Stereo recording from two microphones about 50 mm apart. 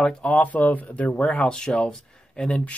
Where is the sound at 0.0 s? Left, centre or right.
Left.